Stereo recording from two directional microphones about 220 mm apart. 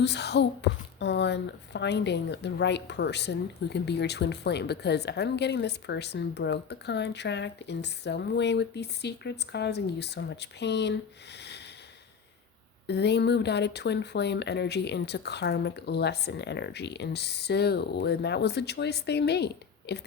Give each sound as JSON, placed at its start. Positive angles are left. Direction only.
{"t": 0.0, "sound": "speech", "side_deg": 50}
{"t": 12.9, "sound": "speech", "side_deg": 50}